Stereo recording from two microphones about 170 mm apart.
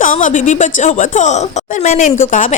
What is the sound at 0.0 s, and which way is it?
A woman's voice, 50° left (ahead or behind).